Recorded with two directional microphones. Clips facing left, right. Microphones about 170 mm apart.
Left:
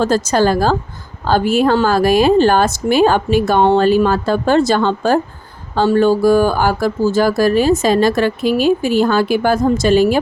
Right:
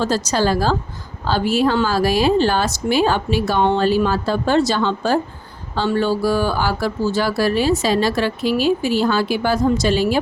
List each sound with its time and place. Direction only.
0.0 s speech: 50° left (ahead or behind)